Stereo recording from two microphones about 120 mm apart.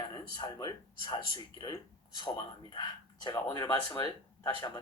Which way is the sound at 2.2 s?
45° left (ahead or behind).